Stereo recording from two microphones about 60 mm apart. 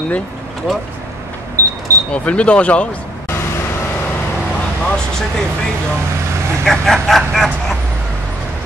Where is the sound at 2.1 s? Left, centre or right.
Centre.